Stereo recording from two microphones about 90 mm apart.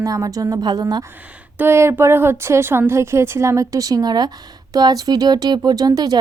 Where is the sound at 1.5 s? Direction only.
25° right (ahead or behind).